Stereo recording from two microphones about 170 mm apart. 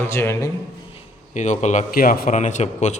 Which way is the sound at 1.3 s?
45° left (ahead or behind).